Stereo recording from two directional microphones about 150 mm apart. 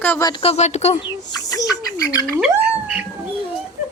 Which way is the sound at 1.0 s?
25° left (ahead or behind).